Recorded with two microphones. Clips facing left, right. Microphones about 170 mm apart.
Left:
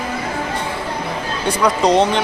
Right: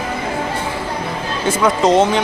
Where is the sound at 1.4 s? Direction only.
Centre (ahead or behind).